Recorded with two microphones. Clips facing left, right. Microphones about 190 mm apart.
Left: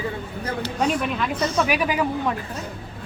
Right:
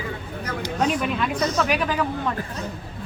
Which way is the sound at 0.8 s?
Centre (ahead or behind).